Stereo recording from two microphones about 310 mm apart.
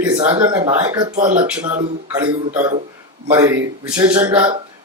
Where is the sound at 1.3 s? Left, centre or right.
Centre.